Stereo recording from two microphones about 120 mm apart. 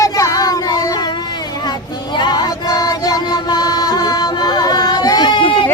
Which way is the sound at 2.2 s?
35° left (ahead or behind).